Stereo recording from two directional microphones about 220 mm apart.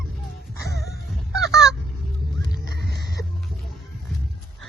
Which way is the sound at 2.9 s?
45° right (ahead or behind).